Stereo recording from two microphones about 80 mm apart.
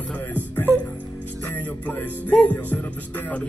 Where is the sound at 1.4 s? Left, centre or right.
Left.